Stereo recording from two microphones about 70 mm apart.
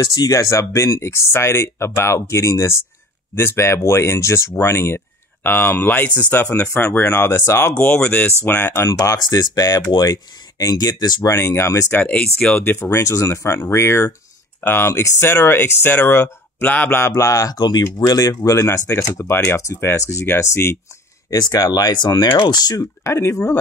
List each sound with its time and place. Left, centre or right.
0.0 s speech: left
8.0 s speech: centre
9.2 s speech: left
9.9 s speech: left
11.2 s speech: left
11.9 s speech: left
12.6 s speech: left
17.2 s speech: left
17.6 s speech: left
18.9 s speech: left
21.3 s speech: left
22.5 s speech: left
23.0 s speech: left